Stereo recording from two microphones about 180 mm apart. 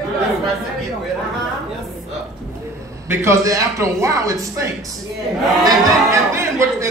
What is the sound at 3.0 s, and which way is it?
A man's voice, 15° right (ahead or behind).